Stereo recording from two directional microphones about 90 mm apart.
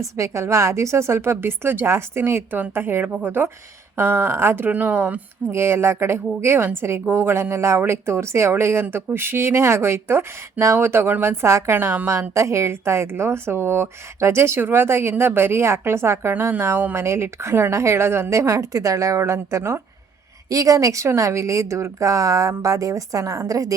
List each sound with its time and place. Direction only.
0.2 s speech: 35° right (ahead or behind); by 5.2 s 15° right (ahead or behind)
5.5 s speech: 30° right (ahead or behind)
12.3 s speech: 35° right (ahead or behind)